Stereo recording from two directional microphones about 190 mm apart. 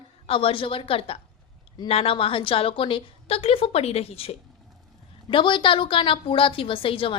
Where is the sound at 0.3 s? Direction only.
30° left (ahead or behind).